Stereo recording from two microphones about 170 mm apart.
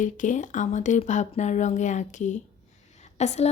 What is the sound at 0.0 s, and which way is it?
A woman's voice, 50° left (ahead or behind).